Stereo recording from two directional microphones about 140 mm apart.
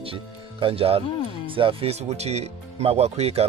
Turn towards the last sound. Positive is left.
turn(degrees=-50)  # may be behind; listen again after turning